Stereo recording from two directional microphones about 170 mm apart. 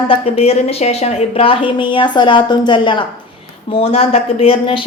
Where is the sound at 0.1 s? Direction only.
35° left (ahead or behind).